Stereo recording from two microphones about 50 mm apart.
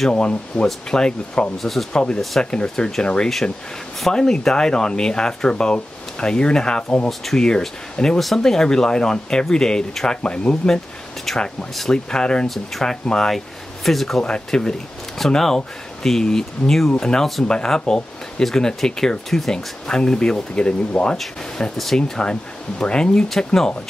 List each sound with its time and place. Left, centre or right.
0.1 s speech: left
1.6 s speech: centre
2.0 s speech: centre
7.1 s speech: centre; by 10.7 s left
11.3 s speech: centre
11.9 s speech: centre
12.4 s speech: centre
13.0 s speech: centre
13.8 s speech: centre
14.2 s speech: centre
21.7 s speech: centre